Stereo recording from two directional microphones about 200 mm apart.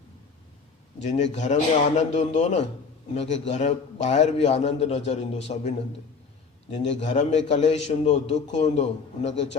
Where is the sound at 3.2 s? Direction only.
65° left (ahead or behind).